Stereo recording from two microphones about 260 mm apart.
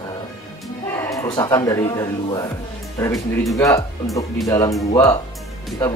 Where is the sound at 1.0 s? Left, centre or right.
Centre.